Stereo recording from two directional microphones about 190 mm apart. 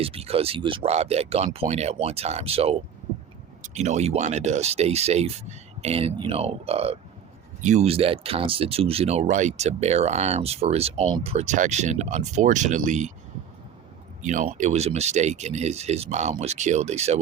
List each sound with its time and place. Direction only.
0.0 s speech: 30° right (ahead or behind)
14.2 s speech: 40° right (ahead or behind)